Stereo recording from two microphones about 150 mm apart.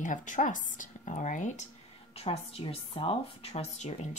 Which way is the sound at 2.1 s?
40° left (ahead or behind).